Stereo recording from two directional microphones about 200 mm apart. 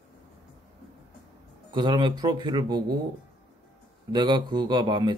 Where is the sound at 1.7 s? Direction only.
20° right (ahead or behind).